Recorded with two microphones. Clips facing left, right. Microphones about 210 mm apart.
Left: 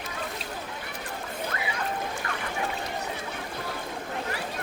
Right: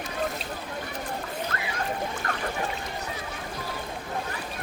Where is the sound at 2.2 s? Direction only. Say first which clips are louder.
Right 2 dB; 45° right (ahead or behind).